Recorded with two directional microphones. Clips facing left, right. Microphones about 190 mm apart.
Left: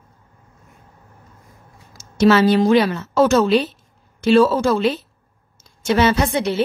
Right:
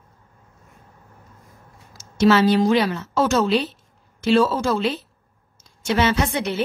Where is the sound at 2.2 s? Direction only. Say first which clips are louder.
Left 2 dB; 55° left (ahead or behind).